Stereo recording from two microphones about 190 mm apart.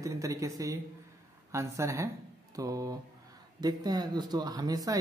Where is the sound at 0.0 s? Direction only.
15° right (ahead or behind).